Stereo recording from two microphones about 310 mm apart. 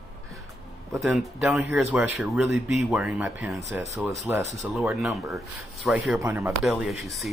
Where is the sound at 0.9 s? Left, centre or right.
Centre.